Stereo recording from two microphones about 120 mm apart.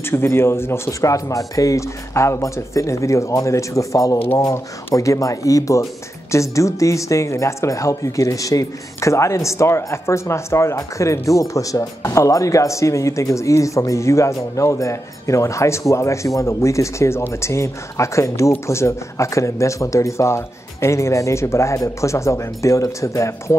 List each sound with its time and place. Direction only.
0.0 s speech: 20° left (ahead or behind)